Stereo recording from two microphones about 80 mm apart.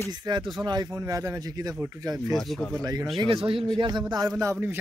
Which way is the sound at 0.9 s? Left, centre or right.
Right.